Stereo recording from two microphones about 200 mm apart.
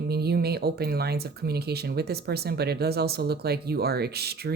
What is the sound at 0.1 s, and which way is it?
Speech, 55° right (ahead or behind).